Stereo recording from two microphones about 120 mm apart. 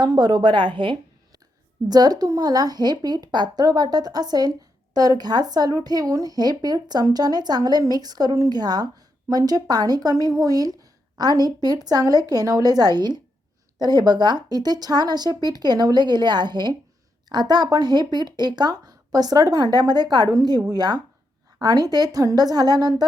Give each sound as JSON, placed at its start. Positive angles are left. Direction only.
{"t": 0.0, "sound": "a woman's voice", "side_deg": -35}